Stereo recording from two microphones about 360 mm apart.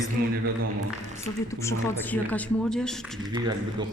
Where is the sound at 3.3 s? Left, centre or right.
Centre.